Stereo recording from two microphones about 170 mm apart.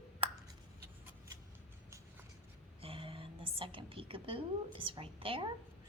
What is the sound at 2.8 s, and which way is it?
A woman's voice, 30° right (ahead or behind).